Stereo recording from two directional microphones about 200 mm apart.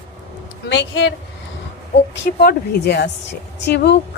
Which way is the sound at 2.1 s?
55° left (ahead or behind).